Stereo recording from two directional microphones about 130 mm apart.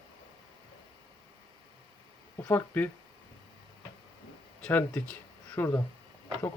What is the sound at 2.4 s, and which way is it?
Speech, 15° left (ahead or behind).